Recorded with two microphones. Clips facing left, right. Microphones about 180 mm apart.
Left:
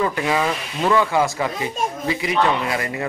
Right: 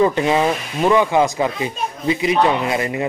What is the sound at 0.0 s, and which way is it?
Speech, 25° right (ahead or behind).